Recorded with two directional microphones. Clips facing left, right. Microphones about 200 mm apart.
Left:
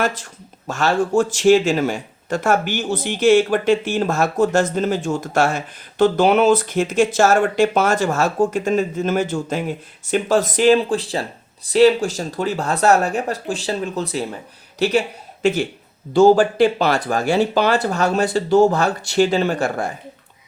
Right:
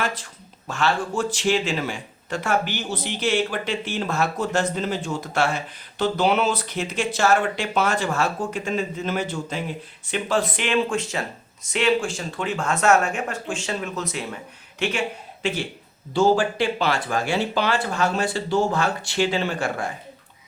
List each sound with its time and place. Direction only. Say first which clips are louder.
0.7 s speech: left 6 dB; 45° left (ahead or behind)